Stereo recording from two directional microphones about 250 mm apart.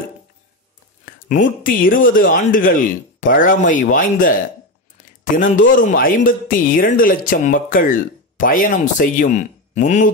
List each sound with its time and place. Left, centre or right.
1.0 s speech: left